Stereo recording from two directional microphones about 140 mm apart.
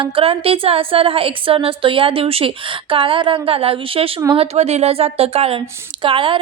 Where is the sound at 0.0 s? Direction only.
40° right (ahead or behind).